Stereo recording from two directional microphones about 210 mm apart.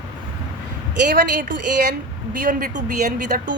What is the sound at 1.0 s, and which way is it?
A woman's voice, 40° right (ahead or behind).